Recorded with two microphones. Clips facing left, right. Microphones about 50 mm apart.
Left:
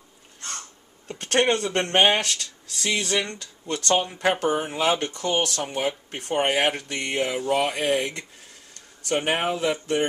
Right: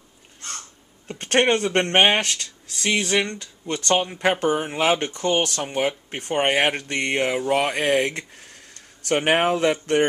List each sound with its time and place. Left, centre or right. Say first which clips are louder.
1.2 s speech: right 2 dB; right
4.0 s speech: right 2 dB; right
4.7 s speech: right 2 dB; right
5.6 s speech: right 3 dB; right
6.1 s speech: right 2 dB; right